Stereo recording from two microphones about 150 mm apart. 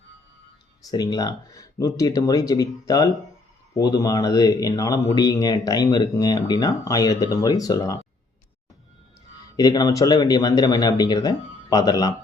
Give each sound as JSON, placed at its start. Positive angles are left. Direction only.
{"t": 0.9, "sound": "speech", "side_deg": 25}
{"t": 9.6, "sound": "speech", "side_deg": 25}